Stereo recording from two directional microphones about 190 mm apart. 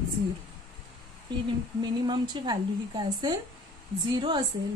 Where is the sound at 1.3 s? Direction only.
25° right (ahead or behind).